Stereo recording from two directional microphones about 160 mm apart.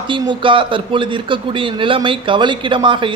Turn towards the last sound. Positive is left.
turn(degrees=-30)  # may be behind; listen again after turning